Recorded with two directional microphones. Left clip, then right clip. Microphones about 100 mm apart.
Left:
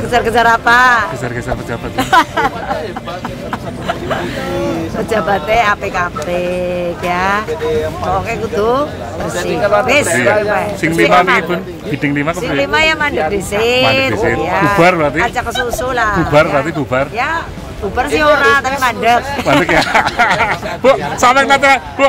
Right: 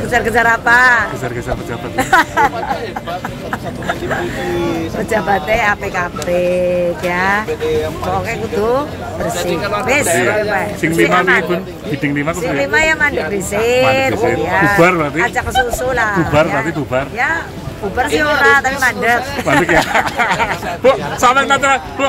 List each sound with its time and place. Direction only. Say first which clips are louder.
0.1 s speech: left 2 dB; 15° left (ahead or behind)
5.1 s speech: left 2 dB; 20° left (ahead or behind)
8.5 s speech: left 2 dB; 15° left (ahead or behind)
10.8 s speech: left 3 dB; 30° left (ahead or behind)
12.4 s speech: left 1 dB; 15° left (ahead or behind)
14.8 s speech: left 2 dB; 30° left (ahead or behind)
15.9 s speech: left 1 dB; 5° left (ahead or behind)
16.3 s speech: left 3 dB; 30° left (ahead or behind)
17.9 s speech: left 3 dB; 10° left (ahead or behind)
19.6 s speech: left 1 dB; 35° left (ahead or behind)